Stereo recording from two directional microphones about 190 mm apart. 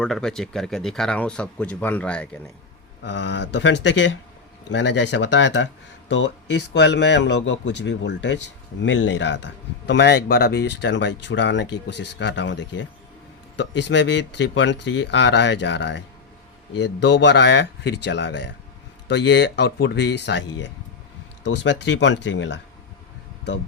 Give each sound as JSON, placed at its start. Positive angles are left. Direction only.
{"t": 0.0, "sound": "speech", "side_deg": 5}
{"t": 3.0, "sound": "a man's voice", "side_deg": 65}
{"t": 21.4, "sound": "a man's voice", "side_deg": 70}